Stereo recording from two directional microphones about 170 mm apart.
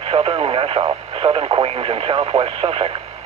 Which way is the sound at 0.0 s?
35° right (ahead or behind).